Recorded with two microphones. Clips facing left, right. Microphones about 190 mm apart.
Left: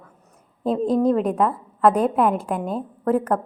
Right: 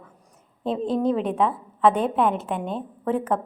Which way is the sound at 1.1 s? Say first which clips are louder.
Left 3 dB; centre (ahead or behind).